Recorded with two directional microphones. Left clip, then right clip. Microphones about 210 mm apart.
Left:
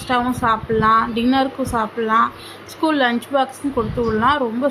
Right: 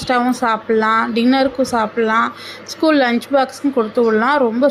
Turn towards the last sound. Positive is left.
turn(degrees=-20)  # may be behind; listen again after turning